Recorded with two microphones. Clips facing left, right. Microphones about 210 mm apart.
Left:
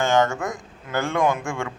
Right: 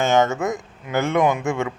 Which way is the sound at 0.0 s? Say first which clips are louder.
Right 2 dB; 20° right (ahead or behind).